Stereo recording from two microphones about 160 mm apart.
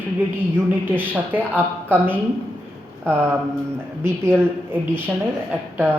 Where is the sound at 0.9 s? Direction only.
10° right (ahead or behind).